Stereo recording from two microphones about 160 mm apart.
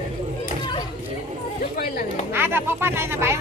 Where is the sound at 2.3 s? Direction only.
15° right (ahead or behind).